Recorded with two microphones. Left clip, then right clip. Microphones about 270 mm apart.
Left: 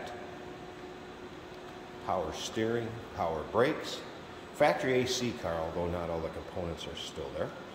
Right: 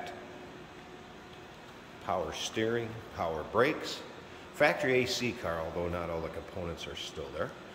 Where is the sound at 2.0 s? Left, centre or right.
Centre.